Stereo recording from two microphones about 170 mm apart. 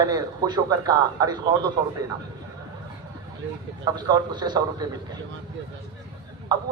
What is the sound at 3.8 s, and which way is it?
A man's voice, 25° right (ahead or behind).